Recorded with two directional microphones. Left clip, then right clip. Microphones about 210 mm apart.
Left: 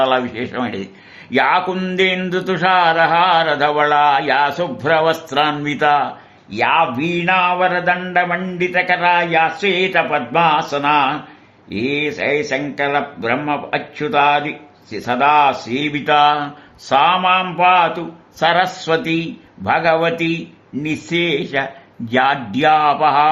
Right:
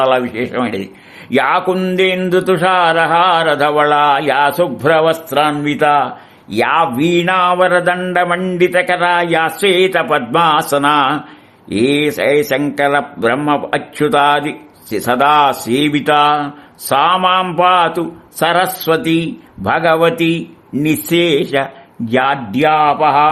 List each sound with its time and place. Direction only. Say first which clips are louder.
0.0 s speech: right 3 dB; 20° right (ahead or behind)
1.3 s speech: right 2 dB; 30° right (ahead or behind)
6.5 s speech: right 2 dB; 40° right (ahead or behind)
22.1 s speech: right 1 dB; 25° right (ahead or behind)